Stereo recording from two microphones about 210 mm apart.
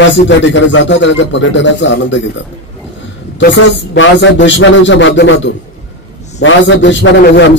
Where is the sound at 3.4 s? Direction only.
60° left (ahead or behind).